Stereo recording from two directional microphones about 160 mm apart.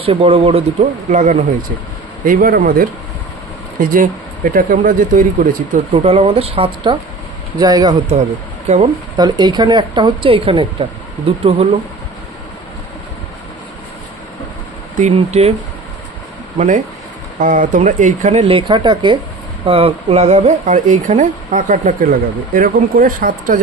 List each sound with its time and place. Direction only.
0.0 s speech: 35° right (ahead or behind)
2.2 s speech: 65° right (ahead or behind)
5.9 s speech: 40° right (ahead or behind)
8.6 s speech: 40° right (ahead or behind)
9.1 s speech: 25° right (ahead or behind)
15.1 s speech: 40° right (ahead or behind)
16.5 s speech: 50° right (ahead or behind)